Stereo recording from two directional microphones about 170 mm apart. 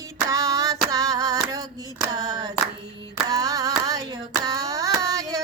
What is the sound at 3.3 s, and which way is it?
Hands, 20° right (ahead or behind).